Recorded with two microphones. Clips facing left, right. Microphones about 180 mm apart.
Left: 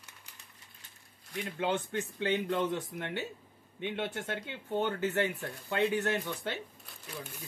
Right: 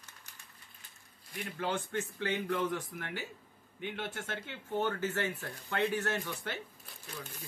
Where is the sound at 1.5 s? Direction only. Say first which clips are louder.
Left 2 dB; 20° left (ahead or behind).